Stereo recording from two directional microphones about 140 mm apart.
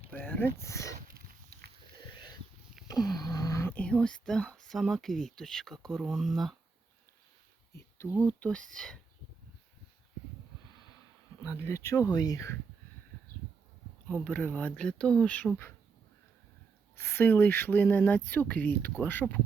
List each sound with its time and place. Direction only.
0.1 s speech: 15° left (ahead or behind)
0.9 s horse: 90° right
2.8 s a sound: 30° left (ahead or behind)
3.8 s speech: 5° left (ahead or behind)
8.2 s speech: 10° left (ahead or behind)
11.4 s speech: 20° left (ahead or behind)
14.1 s speech: 10° left (ahead or behind)
17.0 s speech: 15° left (ahead or behind)